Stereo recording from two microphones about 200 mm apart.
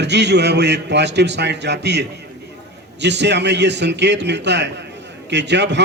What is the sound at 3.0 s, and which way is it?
A man's voice, 60° right (ahead or behind).